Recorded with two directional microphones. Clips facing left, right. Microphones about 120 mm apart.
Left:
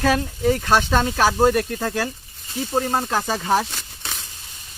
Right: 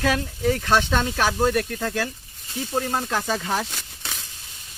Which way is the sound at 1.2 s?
35° left (ahead or behind).